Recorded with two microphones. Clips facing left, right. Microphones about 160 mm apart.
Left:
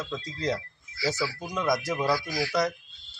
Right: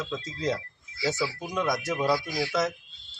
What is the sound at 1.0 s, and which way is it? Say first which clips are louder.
Speech: right 1 dB; 20° right (ahead or behind).